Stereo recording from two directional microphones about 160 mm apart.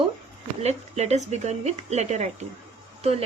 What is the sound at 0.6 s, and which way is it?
Speech, 40° right (ahead or behind).